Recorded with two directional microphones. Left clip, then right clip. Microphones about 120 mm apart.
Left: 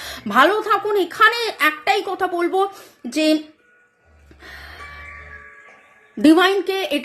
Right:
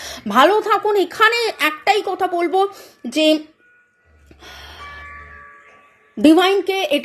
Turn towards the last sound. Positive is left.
turn(degrees=-35)  # may be behind; listen again after turning